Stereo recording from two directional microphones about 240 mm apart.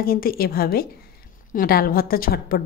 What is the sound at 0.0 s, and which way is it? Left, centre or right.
A woman's voice, left.